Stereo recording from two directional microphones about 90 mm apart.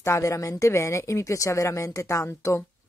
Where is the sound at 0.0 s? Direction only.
35° left (ahead or behind).